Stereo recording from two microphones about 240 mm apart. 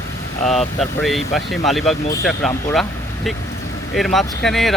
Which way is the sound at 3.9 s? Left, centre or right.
Centre.